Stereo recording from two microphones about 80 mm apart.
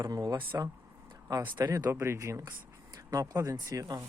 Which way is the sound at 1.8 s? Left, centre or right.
Right.